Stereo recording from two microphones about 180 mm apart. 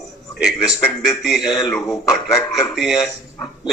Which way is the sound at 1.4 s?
20° left (ahead or behind).